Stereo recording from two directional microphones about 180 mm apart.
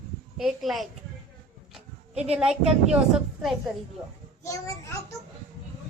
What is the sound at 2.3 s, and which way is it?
A woman's voice, 5° right (ahead or behind).